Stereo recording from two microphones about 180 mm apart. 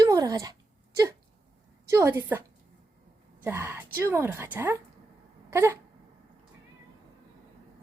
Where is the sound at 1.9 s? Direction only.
15° right (ahead or behind).